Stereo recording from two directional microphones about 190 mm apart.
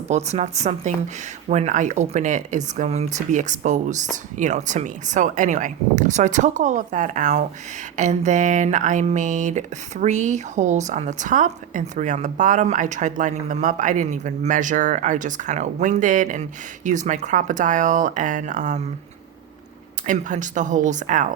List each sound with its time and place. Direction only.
0.1 s speech: 35° right (ahead or behind)
20.1 s speech: 40° right (ahead or behind)